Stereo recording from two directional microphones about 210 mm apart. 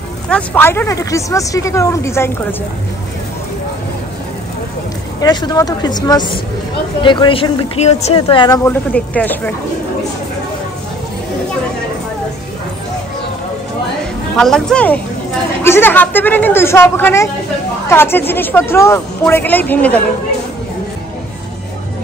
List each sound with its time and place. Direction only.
0.3 s a woman's voice: 10° left (ahead or behind)
5.2 s a woman's voice: 20° left (ahead or behind)
8.6 s a woman's voice: 5° left (ahead or behind)
14.4 s a woman's voice: 5° left (ahead or behind)